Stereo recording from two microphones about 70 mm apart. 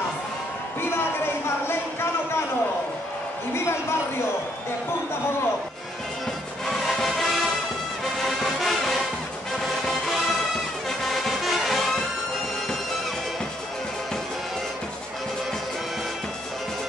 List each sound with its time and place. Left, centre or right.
0.7 s a sound: left
6.6 s music: centre
10.9 s music: centre